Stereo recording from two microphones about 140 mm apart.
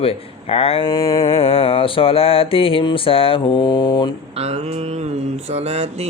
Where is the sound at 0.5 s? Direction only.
45° left (ahead or behind).